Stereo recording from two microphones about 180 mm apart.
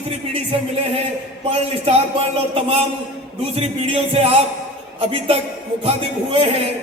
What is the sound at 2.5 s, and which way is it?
Speech, 35° right (ahead or behind).